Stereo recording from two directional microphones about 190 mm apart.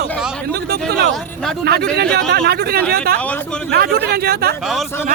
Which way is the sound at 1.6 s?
60° right (ahead or behind).